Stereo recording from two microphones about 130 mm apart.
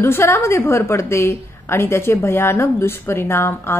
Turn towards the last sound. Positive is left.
turn(degrees=20)  # may be behind; listen again after turning